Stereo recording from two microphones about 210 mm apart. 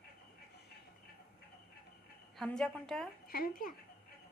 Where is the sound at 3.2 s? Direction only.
45° left (ahead or behind).